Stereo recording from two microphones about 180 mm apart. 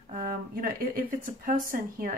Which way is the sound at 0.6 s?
55° right (ahead or behind).